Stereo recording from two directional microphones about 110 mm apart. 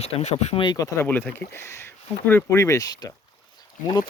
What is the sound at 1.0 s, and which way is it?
Speech, 15° left (ahead or behind).